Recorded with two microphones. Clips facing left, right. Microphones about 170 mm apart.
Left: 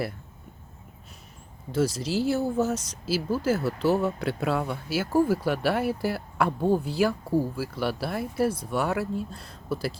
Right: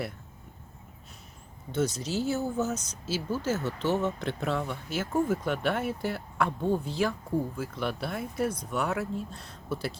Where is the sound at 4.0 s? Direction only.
10° left (ahead or behind).